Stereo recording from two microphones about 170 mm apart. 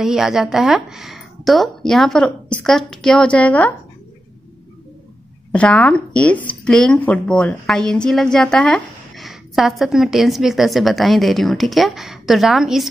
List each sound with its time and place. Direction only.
0.0 s speech: 5° right (ahead or behind)
5.5 s speech: 5° left (ahead or behind)